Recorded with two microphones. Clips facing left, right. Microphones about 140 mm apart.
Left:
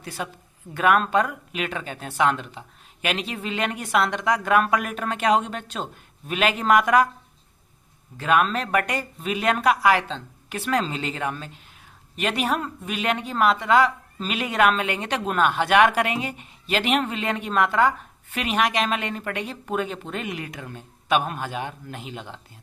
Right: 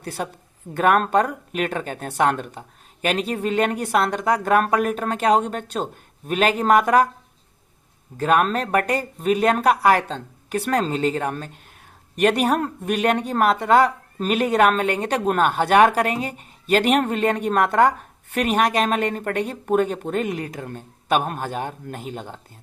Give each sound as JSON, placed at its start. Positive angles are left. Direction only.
{"t": 0.2, "sound": "speech", "side_deg": -40}
{"t": 8.2, "sound": "speech", "side_deg": -40}